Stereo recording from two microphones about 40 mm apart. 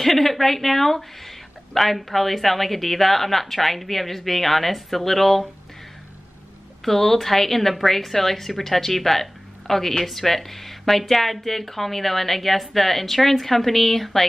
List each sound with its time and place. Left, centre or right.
0.0 s a woman's voice: centre
6.8 s a woman's voice: centre